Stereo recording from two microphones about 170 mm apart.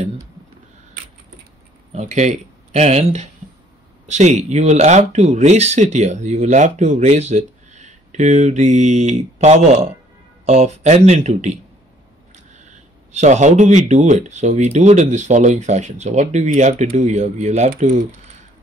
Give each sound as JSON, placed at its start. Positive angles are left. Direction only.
{"t": 1.9, "sound": "speech", "side_deg": -40}
{"t": 12.5, "sound": "speech", "side_deg": -45}